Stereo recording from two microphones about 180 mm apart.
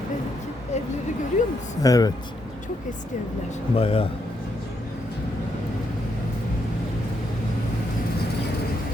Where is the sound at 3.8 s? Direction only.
30° left (ahead or behind).